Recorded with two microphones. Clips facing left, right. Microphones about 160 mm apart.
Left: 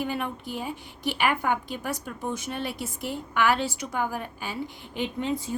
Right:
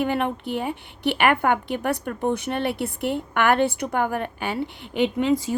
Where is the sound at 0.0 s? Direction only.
65° right (ahead or behind).